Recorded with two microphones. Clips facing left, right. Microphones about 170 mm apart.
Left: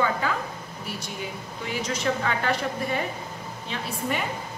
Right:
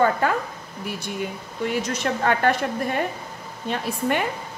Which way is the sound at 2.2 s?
55° right (ahead or behind).